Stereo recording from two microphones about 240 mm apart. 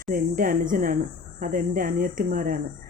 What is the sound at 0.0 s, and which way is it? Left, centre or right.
Speech, right.